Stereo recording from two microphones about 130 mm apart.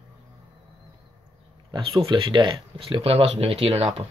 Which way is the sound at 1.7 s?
40° right (ahead or behind).